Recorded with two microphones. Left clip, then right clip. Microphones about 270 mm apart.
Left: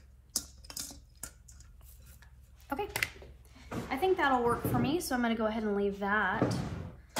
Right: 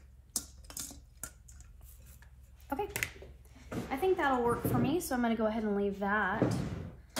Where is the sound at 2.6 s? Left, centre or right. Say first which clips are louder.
Left 2 dB; left.